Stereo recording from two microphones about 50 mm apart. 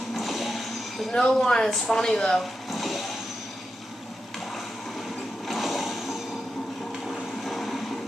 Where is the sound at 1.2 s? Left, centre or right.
Centre.